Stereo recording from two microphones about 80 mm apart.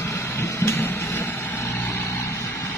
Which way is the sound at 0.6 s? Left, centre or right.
Left.